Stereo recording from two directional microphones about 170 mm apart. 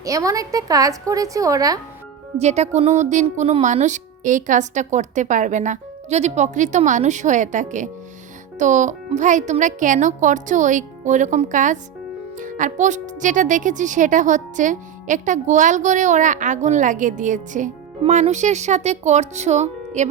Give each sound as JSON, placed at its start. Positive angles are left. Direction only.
{"t": 0.0, "sound": "a woman's voice", "side_deg": -20}
{"t": 2.4, "sound": "speech", "side_deg": -40}